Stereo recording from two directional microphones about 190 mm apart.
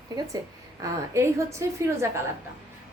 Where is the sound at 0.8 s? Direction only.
15° right (ahead or behind).